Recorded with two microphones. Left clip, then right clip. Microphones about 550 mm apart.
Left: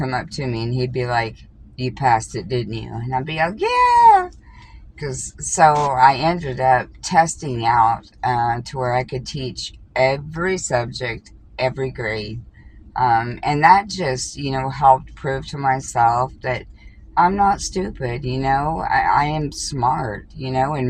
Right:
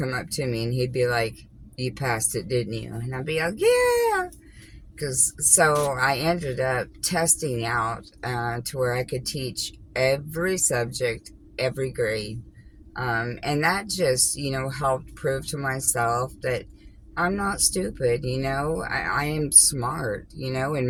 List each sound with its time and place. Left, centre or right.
0.0 s a woman's voice: right
3.8 s a sound: right
4.9 s a woman's voice: right